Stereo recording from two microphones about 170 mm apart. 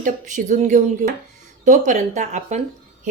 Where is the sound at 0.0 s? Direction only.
45° right (ahead or behind).